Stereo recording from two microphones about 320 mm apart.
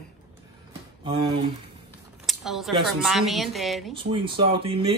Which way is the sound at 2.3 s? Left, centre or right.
Centre.